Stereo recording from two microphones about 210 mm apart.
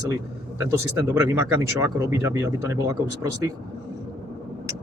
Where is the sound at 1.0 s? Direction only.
10° right (ahead or behind).